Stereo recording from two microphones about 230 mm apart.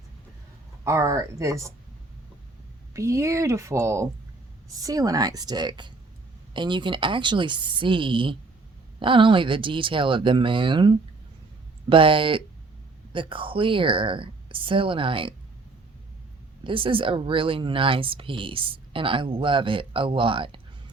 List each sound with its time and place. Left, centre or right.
0.9 s a woman's voice: centre
2.9 s a woman's voice: centre
16.6 s speech: right